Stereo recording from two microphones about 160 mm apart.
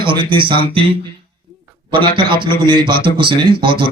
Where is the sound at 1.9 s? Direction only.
30° right (ahead or behind).